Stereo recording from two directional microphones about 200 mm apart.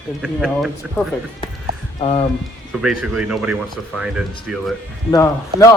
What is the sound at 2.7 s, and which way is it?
Speech, centre (ahead or behind).